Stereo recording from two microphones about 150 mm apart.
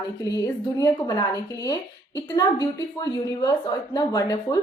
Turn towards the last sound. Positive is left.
turn(degrees=25)  # may be behind; listen again after turning